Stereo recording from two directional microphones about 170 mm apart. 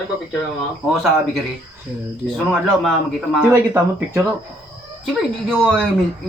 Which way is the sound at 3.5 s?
15° right (ahead or behind).